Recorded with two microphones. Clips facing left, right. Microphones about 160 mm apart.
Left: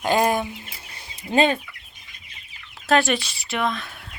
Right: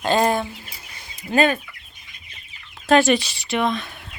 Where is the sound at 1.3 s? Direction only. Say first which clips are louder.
Right 1 dB; 25° left (ahead or behind).